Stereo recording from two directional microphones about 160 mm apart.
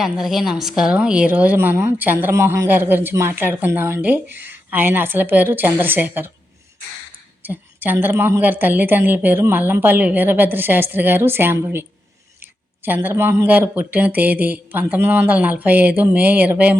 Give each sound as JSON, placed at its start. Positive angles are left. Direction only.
{"t": 0.0, "sound": "a woman's voice", "side_deg": 0}
{"t": 7.4, "sound": "a woman's voice", "side_deg": -10}